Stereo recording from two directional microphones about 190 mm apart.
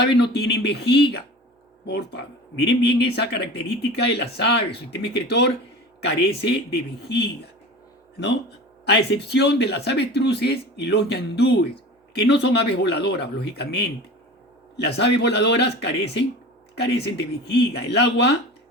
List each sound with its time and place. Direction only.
0.0 s speech: 60° left (ahead or behind)
14.8 s speech: 60° left (ahead or behind)